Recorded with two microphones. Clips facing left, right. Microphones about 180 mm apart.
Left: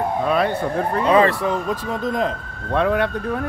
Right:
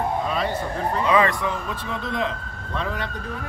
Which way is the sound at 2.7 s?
60° left (ahead or behind).